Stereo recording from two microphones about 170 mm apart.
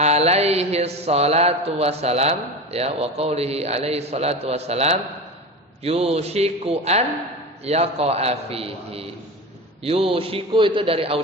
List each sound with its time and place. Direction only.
0.0 s mantra: 40° right (ahead or behind)